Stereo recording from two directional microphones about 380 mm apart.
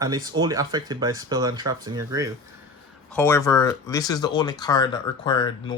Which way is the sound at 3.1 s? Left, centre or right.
Centre.